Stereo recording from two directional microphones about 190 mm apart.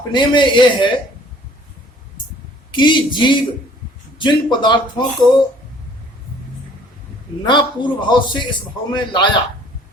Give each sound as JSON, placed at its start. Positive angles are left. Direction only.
{"t": 0.1, "sound": "a man's voice", "side_deg": 25}
{"t": 2.7, "sound": "a man's voice", "side_deg": 25}
{"t": 7.4, "sound": "a man's voice", "side_deg": 25}